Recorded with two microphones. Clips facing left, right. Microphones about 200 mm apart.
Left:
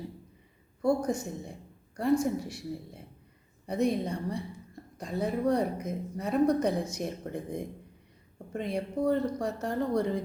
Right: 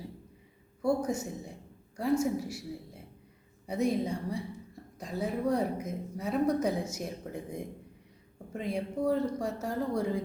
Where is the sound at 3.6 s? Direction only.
5° right (ahead or behind).